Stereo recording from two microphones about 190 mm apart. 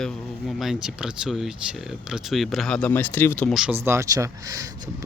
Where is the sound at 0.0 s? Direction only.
Centre (ahead or behind).